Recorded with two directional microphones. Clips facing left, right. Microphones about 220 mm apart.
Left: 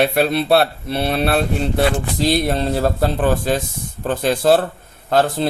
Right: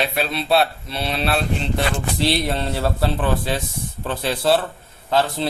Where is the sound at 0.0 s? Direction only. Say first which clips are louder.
Left 7 dB; 55° left (ahead or behind).